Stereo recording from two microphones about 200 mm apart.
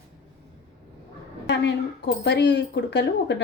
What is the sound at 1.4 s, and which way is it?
Speech, 60° left (ahead or behind).